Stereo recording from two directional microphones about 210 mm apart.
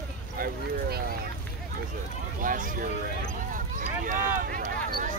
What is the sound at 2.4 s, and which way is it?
Speech, 40° right (ahead or behind).